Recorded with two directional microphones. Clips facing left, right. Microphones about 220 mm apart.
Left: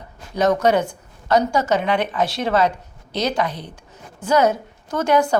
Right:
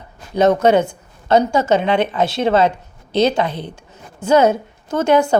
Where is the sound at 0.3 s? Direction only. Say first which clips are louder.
Right 4 dB; 25° right (ahead or behind).